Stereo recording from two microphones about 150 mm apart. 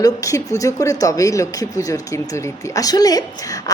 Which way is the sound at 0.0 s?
20° left (ahead or behind).